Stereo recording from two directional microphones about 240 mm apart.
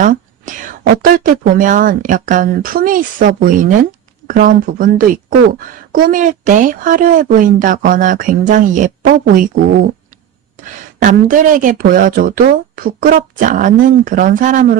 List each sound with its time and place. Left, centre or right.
0.0 s speech: right
10.6 s speech: right